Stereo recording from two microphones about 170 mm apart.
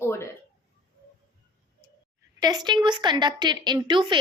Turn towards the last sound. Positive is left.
turn(degrees=-30)  # may be behind; listen again after turning